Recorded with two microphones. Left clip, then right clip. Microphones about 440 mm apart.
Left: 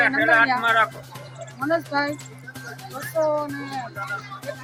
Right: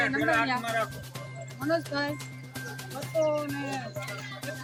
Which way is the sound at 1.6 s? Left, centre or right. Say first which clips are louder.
Left 6 dB; right.